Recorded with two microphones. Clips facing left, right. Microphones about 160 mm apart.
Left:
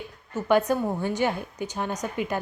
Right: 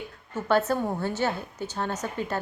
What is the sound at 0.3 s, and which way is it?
A woman's voice, 15° left (ahead or behind).